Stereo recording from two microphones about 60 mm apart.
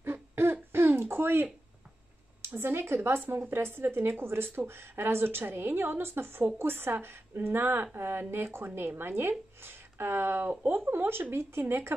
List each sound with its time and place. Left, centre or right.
0.0 s throat clearing: right
2.5 s a woman's voice: right